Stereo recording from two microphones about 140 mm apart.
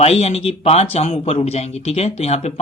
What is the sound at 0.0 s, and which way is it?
Speech, 50° left (ahead or behind).